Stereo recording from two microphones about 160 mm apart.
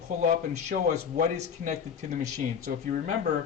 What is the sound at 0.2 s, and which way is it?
Speech, 50° right (ahead or behind).